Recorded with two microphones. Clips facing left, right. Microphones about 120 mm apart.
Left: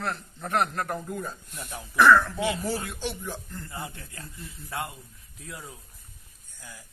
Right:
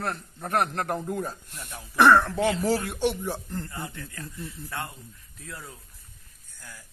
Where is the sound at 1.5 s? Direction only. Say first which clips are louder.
Left 2 dB; 55° left (ahead or behind).